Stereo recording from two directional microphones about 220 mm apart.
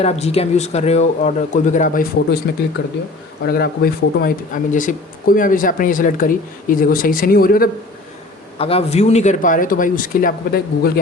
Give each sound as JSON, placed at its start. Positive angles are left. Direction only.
{"t": 0.0, "sound": "speech", "side_deg": 30}
{"t": 8.5, "sound": "speech", "side_deg": 25}